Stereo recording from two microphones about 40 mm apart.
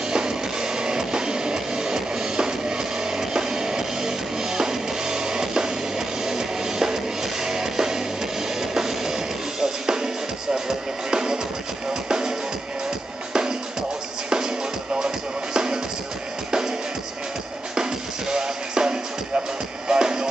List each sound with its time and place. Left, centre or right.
0.1 s music: centre
18.3 s music: right